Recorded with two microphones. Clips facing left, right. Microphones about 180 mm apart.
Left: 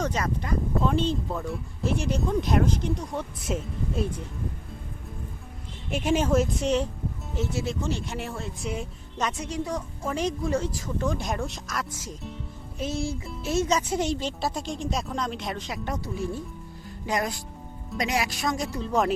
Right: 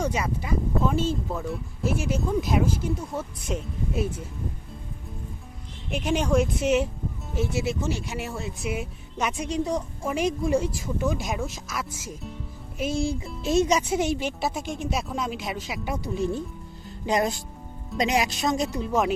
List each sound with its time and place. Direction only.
0.0 s speech: 10° right (ahead or behind)
5.9 s speech: 5° left (ahead or behind); by 16.1 s 10° right (ahead or behind)
16.1 s speech: 20° right (ahead or behind)
18.9 s speech: centre (ahead or behind)